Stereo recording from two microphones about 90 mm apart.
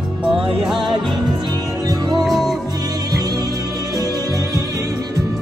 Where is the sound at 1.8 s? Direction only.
50° right (ahead or behind).